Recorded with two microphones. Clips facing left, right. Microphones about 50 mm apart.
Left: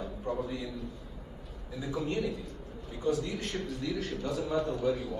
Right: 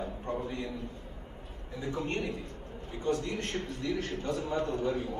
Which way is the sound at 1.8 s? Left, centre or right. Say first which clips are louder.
Left 1 dB; right.